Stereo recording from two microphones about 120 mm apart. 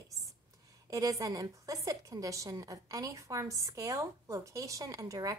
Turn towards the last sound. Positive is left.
turn(degrees=-30)  # may be behind; listen again after turning